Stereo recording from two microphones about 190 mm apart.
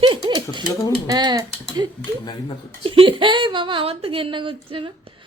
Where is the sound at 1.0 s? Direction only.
20° right (ahead or behind).